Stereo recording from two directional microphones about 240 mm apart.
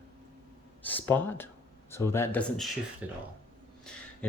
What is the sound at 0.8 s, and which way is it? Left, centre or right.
Speech, centre.